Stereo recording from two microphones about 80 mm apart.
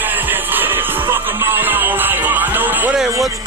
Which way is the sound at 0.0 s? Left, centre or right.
Right.